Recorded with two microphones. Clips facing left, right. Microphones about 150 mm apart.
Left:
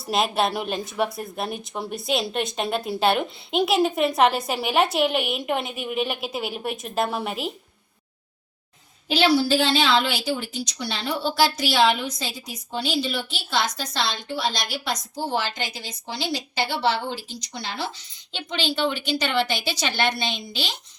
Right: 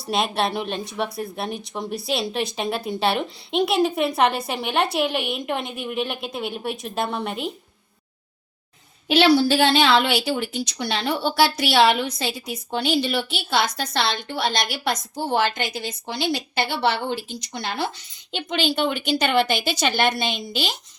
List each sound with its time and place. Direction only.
0.1 s speech: centre (ahead or behind)
9.0 s a woman's voice: 65° right (ahead or behind); by 20.1 s 50° right (ahead or behind)
20.1 s a woman's voice: 10° right (ahead or behind)
20.5 s a woman's voice: 50° right (ahead or behind)